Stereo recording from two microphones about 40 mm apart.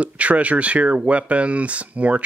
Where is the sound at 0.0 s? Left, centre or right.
Right.